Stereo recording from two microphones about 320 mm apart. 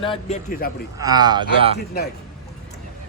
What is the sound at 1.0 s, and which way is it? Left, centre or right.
Speech, centre.